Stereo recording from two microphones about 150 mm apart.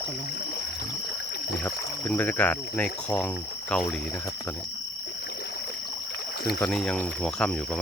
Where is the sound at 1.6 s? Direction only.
10° left (ahead or behind).